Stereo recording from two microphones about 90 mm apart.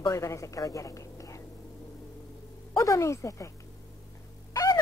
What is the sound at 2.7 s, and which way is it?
Speech, 35° left (ahead or behind).